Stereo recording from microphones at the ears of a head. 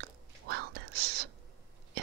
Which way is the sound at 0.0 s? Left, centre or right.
Right.